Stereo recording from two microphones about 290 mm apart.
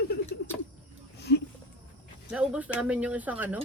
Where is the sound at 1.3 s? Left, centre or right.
Left.